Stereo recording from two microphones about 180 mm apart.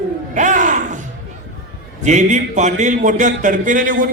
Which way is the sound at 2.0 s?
40° right (ahead or behind).